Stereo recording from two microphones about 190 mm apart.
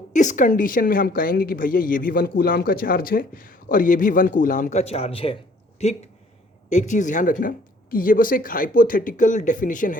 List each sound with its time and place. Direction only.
0.1 s a woman's voice: 40° left (ahead or behind)